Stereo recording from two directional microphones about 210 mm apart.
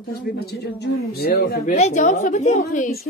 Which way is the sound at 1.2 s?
45° left (ahead or behind).